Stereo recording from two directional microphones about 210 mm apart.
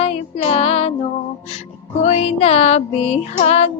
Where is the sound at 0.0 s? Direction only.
30° left (ahead or behind).